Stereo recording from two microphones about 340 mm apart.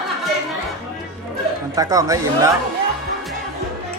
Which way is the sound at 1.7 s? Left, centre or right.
Centre.